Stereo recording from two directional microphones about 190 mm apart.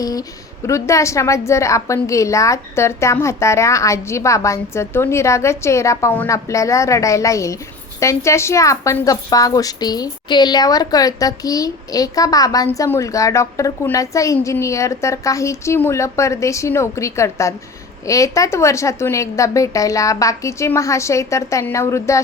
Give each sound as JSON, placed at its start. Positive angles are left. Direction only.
{"t": 0.0, "sound": "a woman's voice", "side_deg": 20}